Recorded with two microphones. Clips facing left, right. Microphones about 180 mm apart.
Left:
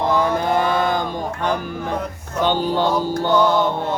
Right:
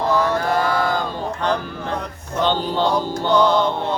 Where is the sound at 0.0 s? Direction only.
20° left (ahead or behind).